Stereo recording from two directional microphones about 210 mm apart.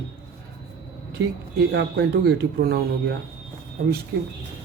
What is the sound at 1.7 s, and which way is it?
Speech, 50° right (ahead or behind).